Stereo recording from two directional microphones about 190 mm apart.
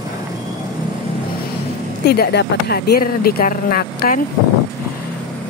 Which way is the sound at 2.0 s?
55° left (ahead or behind).